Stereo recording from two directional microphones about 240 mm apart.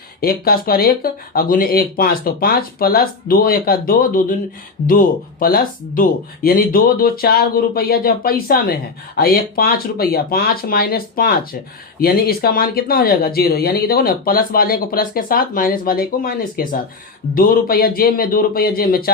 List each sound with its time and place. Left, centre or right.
0.2 s speech: left